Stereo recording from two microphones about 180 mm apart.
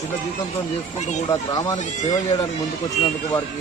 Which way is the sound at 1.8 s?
40° left (ahead or behind).